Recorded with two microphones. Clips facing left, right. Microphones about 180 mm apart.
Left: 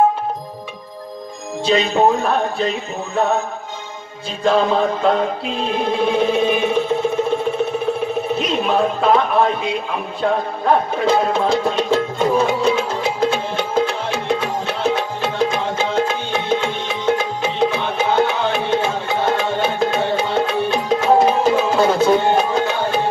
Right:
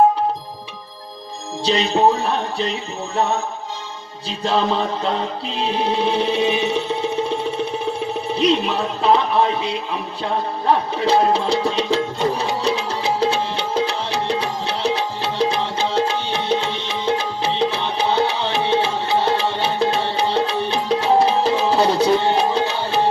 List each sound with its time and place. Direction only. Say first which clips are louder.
1.7 s music: left 1 dB; 50° left (ahead or behind)
4.4 s music: left 4 dB; 50° left (ahead or behind)